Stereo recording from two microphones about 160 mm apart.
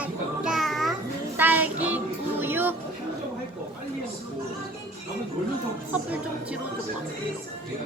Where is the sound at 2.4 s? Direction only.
15° right (ahead or behind).